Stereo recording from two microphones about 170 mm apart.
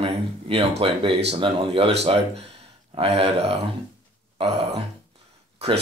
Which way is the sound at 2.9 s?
35° right (ahead or behind).